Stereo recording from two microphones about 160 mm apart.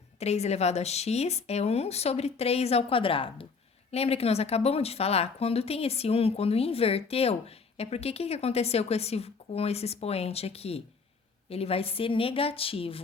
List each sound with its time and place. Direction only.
0.2 s speech: 40° left (ahead or behind)